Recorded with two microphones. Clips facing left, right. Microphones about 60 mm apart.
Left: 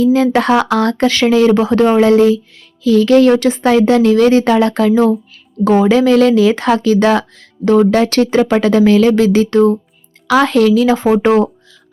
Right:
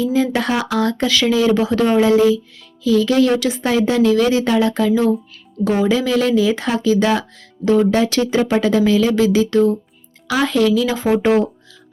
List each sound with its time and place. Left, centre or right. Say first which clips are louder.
0.0 s speech: left 6 dB; left
10.2 s speech: left 5 dB; left